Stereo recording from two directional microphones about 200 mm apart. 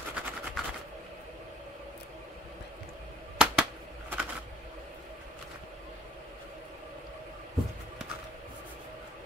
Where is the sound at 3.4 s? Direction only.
5° right (ahead or behind).